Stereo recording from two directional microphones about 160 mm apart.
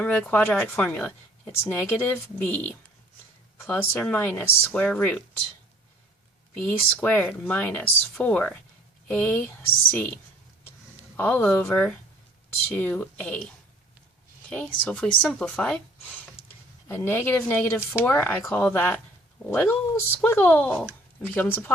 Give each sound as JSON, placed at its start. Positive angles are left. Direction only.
{"t": 0.0, "sound": "speech", "side_deg": 10}
{"t": 6.6, "sound": "speech", "side_deg": 5}
{"t": 11.2, "sound": "speech", "side_deg": 10}
{"t": 14.8, "sound": "speech", "side_deg": 5}
{"t": 16.9, "sound": "speech", "side_deg": 15}